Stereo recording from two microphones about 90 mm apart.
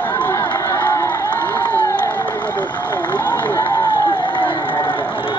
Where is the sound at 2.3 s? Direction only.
20° left (ahead or behind).